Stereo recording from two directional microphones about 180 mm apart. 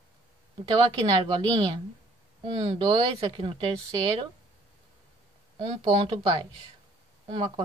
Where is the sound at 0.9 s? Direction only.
35° right (ahead or behind).